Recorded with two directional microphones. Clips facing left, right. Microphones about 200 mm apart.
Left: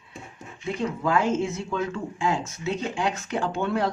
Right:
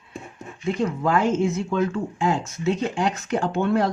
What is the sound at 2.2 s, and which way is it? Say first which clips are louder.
Speech: right 3 dB; 45° right (ahead or behind).